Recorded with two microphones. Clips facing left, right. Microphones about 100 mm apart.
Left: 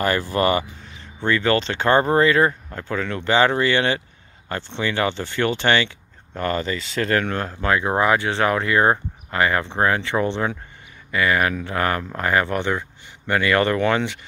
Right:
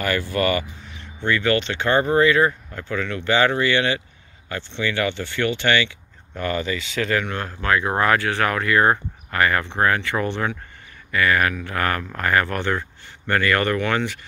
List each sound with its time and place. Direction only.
0.0 s speech: 35° left (ahead or behind)